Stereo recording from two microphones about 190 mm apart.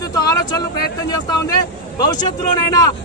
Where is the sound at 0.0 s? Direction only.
20° left (ahead or behind).